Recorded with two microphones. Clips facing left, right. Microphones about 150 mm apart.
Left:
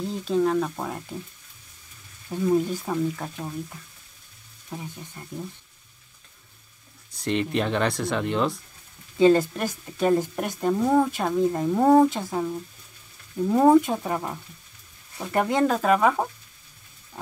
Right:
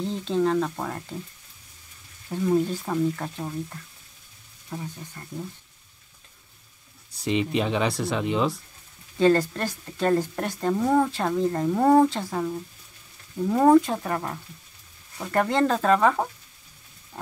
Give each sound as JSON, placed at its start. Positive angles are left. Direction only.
{"t": 0.0, "sound": "speech", "side_deg": 5}
{"t": 2.3, "sound": "speech", "side_deg": -5}
{"t": 2.9, "sound": "speech", "side_deg": 5}
{"t": 7.2, "sound": "speech", "side_deg": 0}
{"t": 9.2, "sound": "speech", "side_deg": 15}
{"t": 12.1, "sound": "speech", "side_deg": 15}